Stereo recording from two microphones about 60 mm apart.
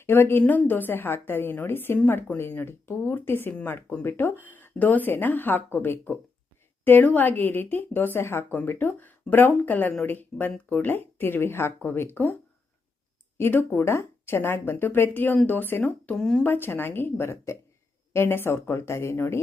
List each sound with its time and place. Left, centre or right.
0.0 s a woman's voice: left
13.4 s speech: left
16.1 s speech: centre
16.4 s speech: left